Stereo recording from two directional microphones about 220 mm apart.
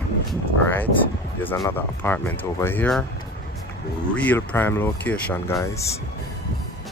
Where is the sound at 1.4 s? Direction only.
10° left (ahead or behind).